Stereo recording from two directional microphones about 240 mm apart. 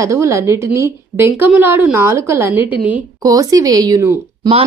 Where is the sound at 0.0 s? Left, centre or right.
Centre.